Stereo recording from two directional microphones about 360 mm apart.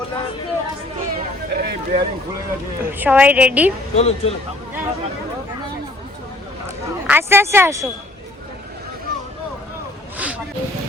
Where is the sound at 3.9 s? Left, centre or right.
Centre.